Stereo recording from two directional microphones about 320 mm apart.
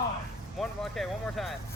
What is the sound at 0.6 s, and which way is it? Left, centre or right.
Speech, centre.